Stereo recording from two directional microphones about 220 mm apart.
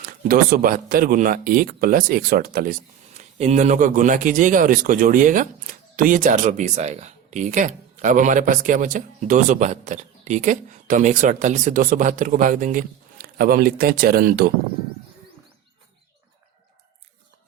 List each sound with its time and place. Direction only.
0.3 s a man's voice: 40° right (ahead or behind)
3.2 s a man's voice: 30° right (ahead or behind)